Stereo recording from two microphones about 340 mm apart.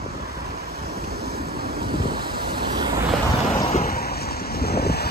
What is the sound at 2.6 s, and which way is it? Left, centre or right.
Vehicle, centre.